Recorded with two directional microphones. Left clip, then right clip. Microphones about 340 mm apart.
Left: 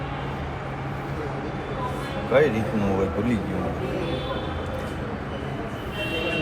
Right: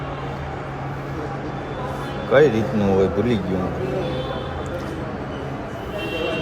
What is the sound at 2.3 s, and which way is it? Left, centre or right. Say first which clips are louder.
Speech: right 5 dB; right.